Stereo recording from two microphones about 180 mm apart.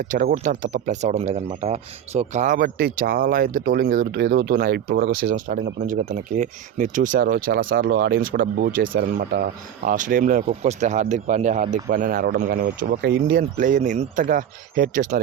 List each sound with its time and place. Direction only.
0.0 s speech: 50° right (ahead or behind)
10.4 s speech: 35° right (ahead or behind)